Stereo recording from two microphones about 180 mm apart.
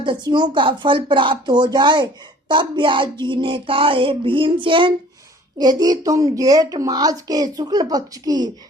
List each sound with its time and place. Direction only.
0.0 s speech: 25° right (ahead or behind)